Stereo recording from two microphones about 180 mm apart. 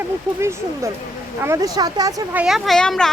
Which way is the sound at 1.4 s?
15° right (ahead or behind).